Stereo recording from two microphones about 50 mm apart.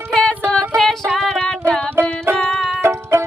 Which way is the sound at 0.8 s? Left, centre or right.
Centre.